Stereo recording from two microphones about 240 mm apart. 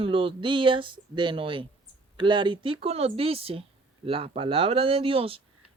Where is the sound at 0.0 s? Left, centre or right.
Right.